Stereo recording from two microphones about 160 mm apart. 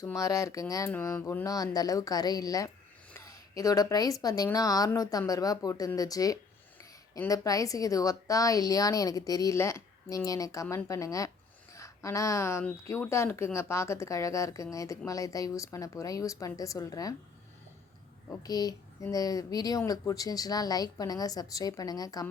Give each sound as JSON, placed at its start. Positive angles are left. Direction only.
{"t": 0.0, "sound": "speech", "side_deg": 20}
{"t": 18.4, "sound": "speech", "side_deg": 25}